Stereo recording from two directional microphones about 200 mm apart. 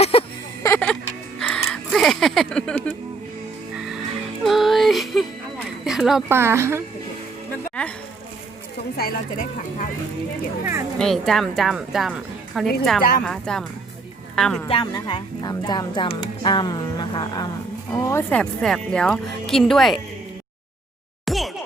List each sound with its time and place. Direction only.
0.0 s a sound: 30° left (ahead or behind)
0.6 s music: 10° left (ahead or behind)
4.4 s a sound: centre (ahead or behind)
6.3 s a woman's voice: 10° right (ahead or behind)
7.8 s speech: 5° left (ahead or behind)
9.0 s speech: 45° left (ahead or behind)
10.9 s speech: centre (ahead or behind)
14.7 s speech: 20° left (ahead or behind); by 20.0 s centre (ahead or behind)
21.2 s a sound: centre (ahead or behind)